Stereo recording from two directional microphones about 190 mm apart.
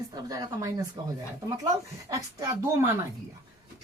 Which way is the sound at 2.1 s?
15° right (ahead or behind).